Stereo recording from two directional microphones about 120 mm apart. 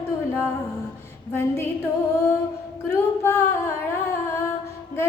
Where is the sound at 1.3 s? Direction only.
20° left (ahead or behind).